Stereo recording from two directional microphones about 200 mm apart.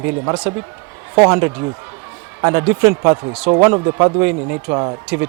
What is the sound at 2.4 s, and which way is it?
Speech, 15° right (ahead or behind).